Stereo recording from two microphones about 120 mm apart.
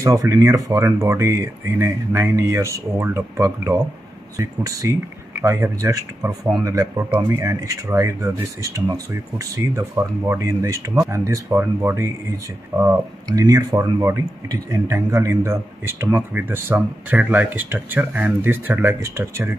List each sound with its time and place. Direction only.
0.0 s speech: 25° right (ahead or behind)
12.7 s speech: 30° right (ahead or behind)